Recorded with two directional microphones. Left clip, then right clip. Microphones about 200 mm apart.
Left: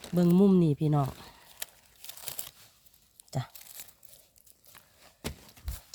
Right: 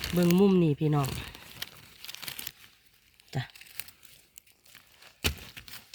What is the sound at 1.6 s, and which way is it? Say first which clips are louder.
Crumpling: right 3 dB; 60° left (ahead or behind).